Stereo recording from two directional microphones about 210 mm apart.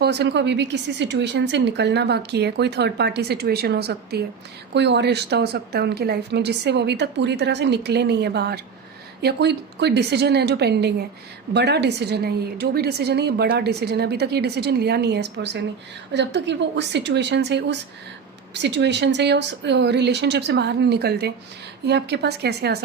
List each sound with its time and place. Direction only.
0.0 s a woman's voice: 50° right (ahead or behind)